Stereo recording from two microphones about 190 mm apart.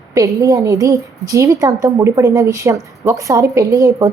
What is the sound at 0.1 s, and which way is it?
A woman's voice, 15° right (ahead or behind).